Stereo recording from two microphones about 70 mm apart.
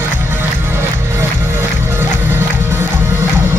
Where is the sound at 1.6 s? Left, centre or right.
Right.